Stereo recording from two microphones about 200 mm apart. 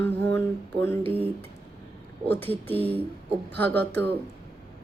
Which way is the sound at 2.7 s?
30° right (ahead or behind).